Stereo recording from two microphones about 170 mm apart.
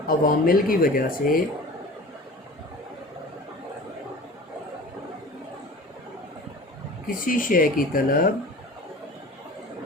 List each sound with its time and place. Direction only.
0.1 s speech: 55° left (ahead or behind)
7.1 s speech: 55° left (ahead or behind)